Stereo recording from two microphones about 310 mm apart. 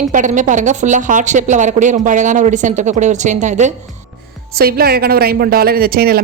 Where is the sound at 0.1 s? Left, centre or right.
Right.